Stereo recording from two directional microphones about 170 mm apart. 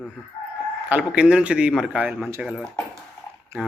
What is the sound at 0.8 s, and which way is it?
Speech, 10° right (ahead or behind).